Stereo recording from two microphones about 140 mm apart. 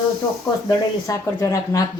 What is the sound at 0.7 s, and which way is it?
Speech, 25° left (ahead or behind).